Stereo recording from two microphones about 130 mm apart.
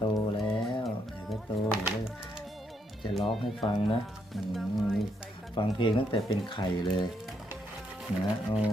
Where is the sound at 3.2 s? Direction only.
40° left (ahead or behind).